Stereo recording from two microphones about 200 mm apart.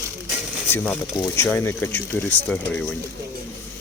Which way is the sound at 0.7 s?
5° left (ahead or behind).